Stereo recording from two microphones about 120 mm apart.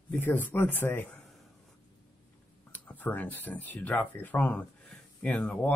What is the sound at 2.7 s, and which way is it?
Speech, 15° left (ahead or behind).